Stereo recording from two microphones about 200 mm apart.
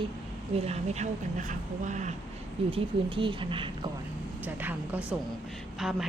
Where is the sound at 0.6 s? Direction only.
35° right (ahead or behind).